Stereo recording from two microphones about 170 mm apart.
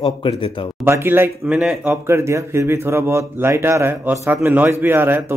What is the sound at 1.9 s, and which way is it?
Speech, 15° right (ahead or behind).